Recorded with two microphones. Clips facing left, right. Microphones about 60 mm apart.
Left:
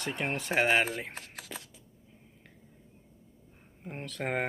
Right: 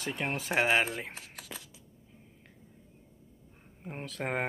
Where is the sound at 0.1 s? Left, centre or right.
Centre.